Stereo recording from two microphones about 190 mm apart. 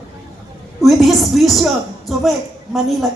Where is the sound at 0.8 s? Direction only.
Centre (ahead or behind).